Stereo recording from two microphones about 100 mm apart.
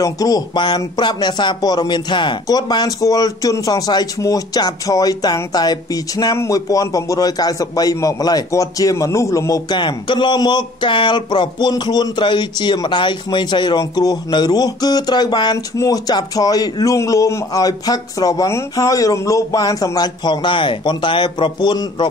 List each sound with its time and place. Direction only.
0.0 s speech: 40° left (ahead or behind)
6.3 s speech: 30° left (ahead or behind)
9.8 s speech: 50° left (ahead or behind)